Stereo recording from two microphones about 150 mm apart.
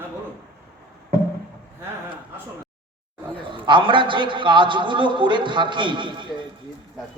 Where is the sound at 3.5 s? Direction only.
35° right (ahead or behind).